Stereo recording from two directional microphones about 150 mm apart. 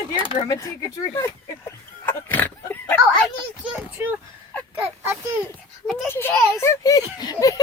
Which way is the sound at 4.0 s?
15° right (ahead or behind).